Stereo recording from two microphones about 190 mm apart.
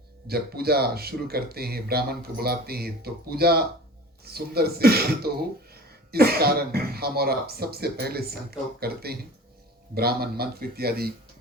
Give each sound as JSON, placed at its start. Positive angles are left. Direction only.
{"t": 0.3, "sound": "speech", "side_deg": -55}